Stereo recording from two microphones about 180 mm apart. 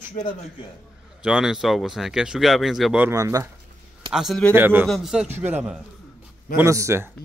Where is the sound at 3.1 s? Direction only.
20° right (ahead or behind).